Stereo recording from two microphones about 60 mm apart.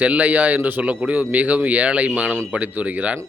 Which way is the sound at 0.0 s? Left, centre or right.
Right.